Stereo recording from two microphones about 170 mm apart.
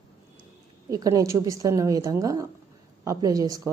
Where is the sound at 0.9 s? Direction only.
20° right (ahead or behind).